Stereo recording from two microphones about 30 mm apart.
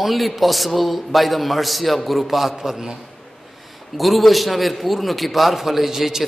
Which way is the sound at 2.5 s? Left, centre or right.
Centre.